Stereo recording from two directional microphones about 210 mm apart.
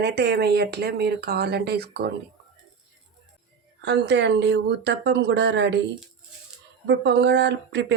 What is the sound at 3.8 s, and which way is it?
Speech, 55° right (ahead or behind).